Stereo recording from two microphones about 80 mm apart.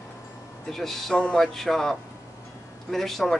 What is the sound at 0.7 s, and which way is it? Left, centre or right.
Speech, centre.